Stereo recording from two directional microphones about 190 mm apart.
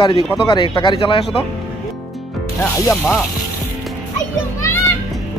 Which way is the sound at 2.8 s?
10° left (ahead or behind).